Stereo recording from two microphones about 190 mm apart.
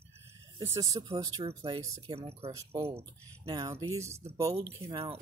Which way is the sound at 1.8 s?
15° right (ahead or behind).